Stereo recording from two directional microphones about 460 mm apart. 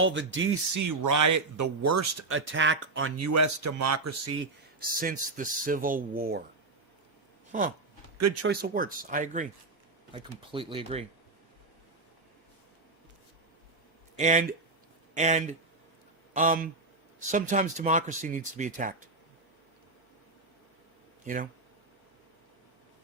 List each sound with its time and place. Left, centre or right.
0.0 s speech: right
0.7 s speech: right
4.8 s speech: centre
7.5 s speech: centre
8.2 s speech: right; by 11.0 s centre
14.2 s speech: centre